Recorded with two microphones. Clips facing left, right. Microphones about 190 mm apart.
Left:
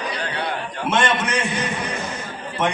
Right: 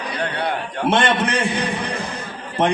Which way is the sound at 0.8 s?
35° right (ahead or behind).